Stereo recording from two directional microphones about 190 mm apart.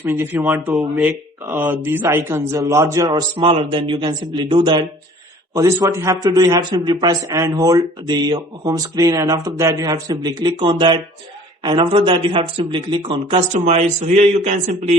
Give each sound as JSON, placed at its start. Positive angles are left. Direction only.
{"t": 0.0, "sound": "a man's voice", "side_deg": -10}